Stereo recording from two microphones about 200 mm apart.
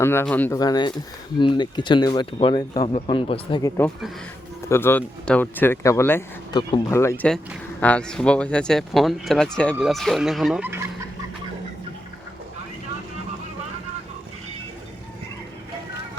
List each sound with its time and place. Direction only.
0.0 s speech: 10° left (ahead or behind)
0.6 s speech: 20° left (ahead or behind)
3.6 s speech: 10° left (ahead or behind); by 10.8 s 10° right (ahead or behind)